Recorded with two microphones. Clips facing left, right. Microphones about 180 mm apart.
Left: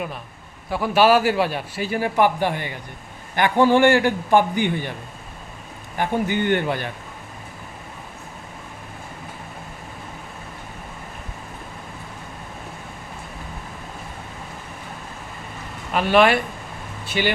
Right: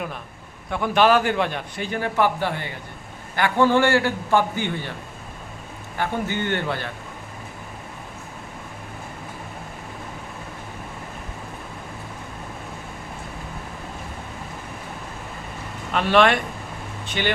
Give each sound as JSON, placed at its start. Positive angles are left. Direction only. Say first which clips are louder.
{"t": 0.7, "sound": "a man's voice", "louder": "left 2 dB", "side_deg": 5}
{"t": 6.0, "sound": "a man's voice", "louder": "left 3 dB", "side_deg": 15}
{"t": 15.9, "sound": "a man's voice", "louder": "left 1 dB", "side_deg": 5}